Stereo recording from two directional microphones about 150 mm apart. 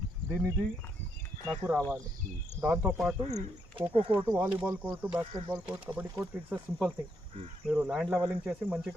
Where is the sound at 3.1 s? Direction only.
45° right (ahead or behind).